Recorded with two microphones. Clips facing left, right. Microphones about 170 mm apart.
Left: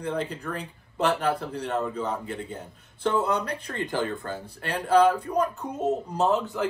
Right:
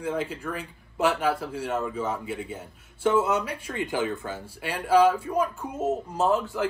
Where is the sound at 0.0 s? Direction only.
Centre (ahead or behind).